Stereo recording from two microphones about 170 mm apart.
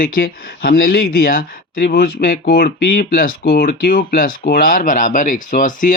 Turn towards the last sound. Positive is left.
turn(degrees=50)  # may be behind; listen again after turning